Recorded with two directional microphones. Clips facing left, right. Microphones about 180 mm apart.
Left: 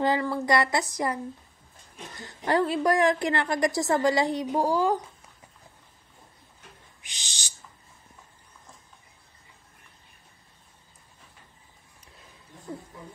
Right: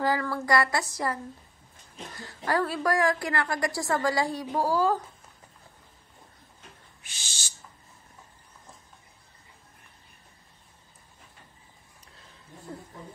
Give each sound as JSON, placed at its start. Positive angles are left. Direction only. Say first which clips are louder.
{"t": 0.0, "sound": "a woman's voice", "louder": "left 2 dB", "side_deg": 20}
{"t": 7.0, "sound": "owl", "louder": "left 1 dB", "side_deg": 15}